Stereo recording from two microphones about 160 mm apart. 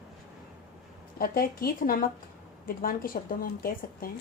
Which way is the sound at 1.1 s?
65° left (ahead or behind).